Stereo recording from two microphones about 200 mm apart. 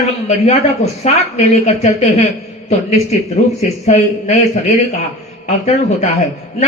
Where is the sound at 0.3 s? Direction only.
35° left (ahead or behind).